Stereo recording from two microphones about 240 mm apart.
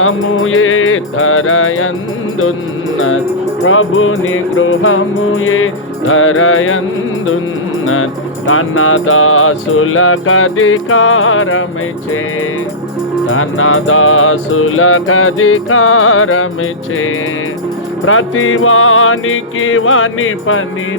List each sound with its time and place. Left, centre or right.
0.0 s music: left
3.7 s music: left
8.4 s music: left
13.3 s music: left
18.0 s music: left